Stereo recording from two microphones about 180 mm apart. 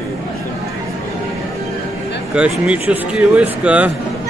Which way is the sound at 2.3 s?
5° right (ahead or behind).